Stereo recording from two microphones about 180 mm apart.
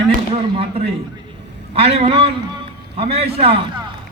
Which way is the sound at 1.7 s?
35° right (ahead or behind).